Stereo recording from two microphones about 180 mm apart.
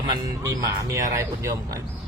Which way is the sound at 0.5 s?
20° right (ahead or behind).